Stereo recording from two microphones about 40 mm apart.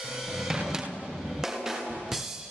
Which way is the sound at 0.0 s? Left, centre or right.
Centre.